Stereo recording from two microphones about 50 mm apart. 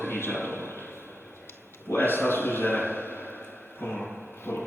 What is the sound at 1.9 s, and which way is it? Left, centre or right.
Speech, left.